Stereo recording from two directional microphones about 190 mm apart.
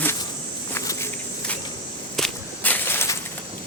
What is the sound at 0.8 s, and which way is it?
Walk, 15° left (ahead or behind).